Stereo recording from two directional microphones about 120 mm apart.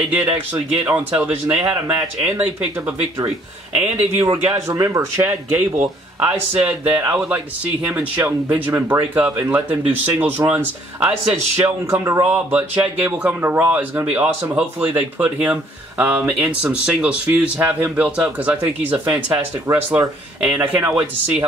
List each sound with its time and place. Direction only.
0.5 s speech: 15° right (ahead or behind)
2.0 s speech: 20° right (ahead or behind)
3.7 s speech: 10° right (ahead or behind)
4.6 s speech: 25° right (ahead or behind)
12.3 s speech: 15° right (ahead or behind)